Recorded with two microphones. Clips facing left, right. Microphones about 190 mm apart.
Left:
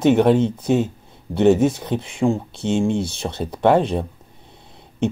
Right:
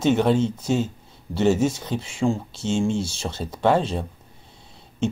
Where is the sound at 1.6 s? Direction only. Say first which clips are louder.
Left 4 dB; 60° left (ahead or behind).